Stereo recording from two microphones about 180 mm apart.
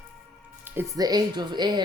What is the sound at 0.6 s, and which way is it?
Speech, 15° right (ahead or behind).